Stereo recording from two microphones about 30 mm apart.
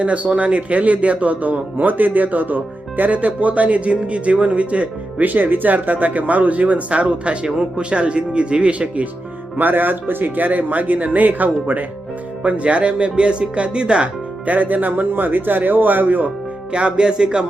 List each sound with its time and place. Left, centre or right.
0.0 s a man's voice: right
5.2 s speech: right
9.6 s speech: right
12.4 s speech: right
14.4 s speech: right
16.7 s speech: right